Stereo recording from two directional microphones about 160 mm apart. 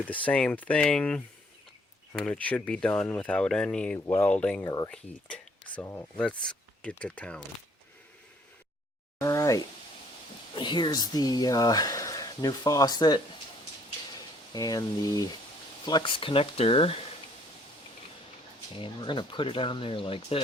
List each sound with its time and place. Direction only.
0.0 s speech: 10° left (ahead or behind)
4.6 s speech: 20° left (ahead or behind)
4.9 s speech: 10° left (ahead or behind)
9.2 s speech: 20° left (ahead or behind)
14.5 s speech: 25° left (ahead or behind)
18.8 s speech: 30° left (ahead or behind)